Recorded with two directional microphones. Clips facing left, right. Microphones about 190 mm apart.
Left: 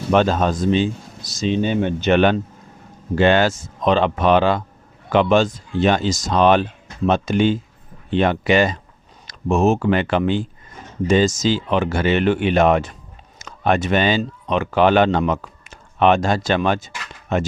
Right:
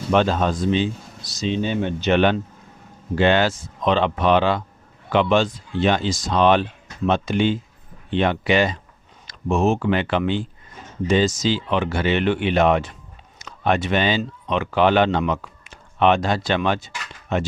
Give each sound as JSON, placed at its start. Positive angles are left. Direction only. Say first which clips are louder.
{"t": 0.1, "sound": "speech", "louder": "left 2 dB", "side_deg": 45}